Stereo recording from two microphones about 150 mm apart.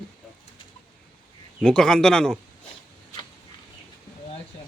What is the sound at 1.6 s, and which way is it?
Speech, 5° left (ahead or behind).